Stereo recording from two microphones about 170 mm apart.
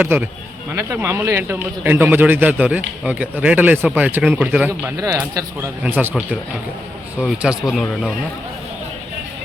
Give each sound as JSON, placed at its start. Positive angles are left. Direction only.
{"t": 0.0, "sound": "speech", "side_deg": -10}
{"t": 4.9, "sound": "speech", "side_deg": -20}